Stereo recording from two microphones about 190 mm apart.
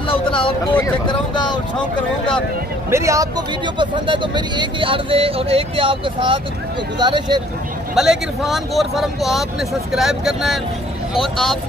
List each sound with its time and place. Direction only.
0.1 s a sound: 30° left (ahead or behind)
1.0 s vehicle: 25° left (ahead or behind)
2.9 s speech: 15° right (ahead or behind)
7.9 s speech: 5° right (ahead or behind)